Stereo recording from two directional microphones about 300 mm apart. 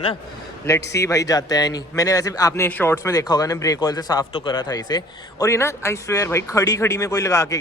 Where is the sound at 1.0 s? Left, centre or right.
Centre.